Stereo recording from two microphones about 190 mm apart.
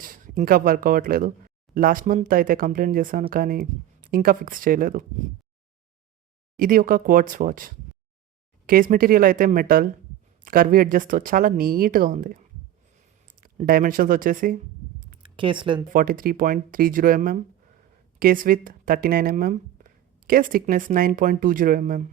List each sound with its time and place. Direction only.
0.0 s speech: 45° right (ahead or behind)
6.6 s speech: 50° right (ahead or behind)
15.2 s speech: 25° right (ahead or behind)
15.9 s speech: 45° right (ahead or behind)